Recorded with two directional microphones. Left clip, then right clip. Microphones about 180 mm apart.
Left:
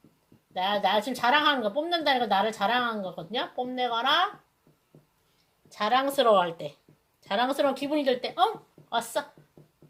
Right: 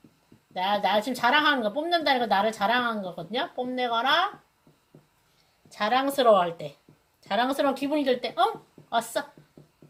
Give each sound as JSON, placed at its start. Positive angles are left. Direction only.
{"t": 0.6, "sound": "a woman's voice", "side_deg": 25}
{"t": 5.7, "sound": "a woman's voice", "side_deg": 30}
{"t": 7.2, "sound": "a sound", "side_deg": 35}
{"t": 7.5, "sound": "a woman's voice", "side_deg": 25}